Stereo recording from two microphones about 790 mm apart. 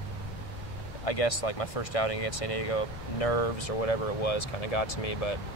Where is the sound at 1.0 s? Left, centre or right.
Left.